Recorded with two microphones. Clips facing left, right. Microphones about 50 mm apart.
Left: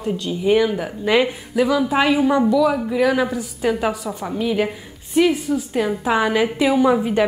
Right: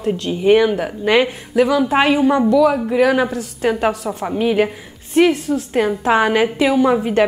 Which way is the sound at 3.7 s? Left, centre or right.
Centre.